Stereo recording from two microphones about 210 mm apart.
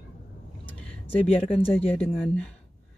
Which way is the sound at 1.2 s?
30° left (ahead or behind).